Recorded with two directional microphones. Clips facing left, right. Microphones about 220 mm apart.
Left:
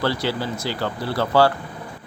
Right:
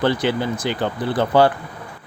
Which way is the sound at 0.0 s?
20° right (ahead or behind).